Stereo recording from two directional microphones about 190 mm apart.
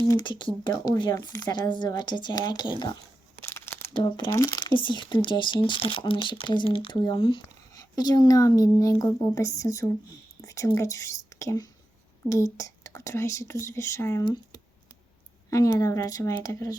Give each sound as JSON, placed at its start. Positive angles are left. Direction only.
{"t": 0.1, "sound": "speech", "side_deg": 25}
{"t": 3.4, "sound": "a sound", "side_deg": 10}
{"t": 4.3, "sound": "speech", "side_deg": 15}
{"t": 15.4, "sound": "speech", "side_deg": 15}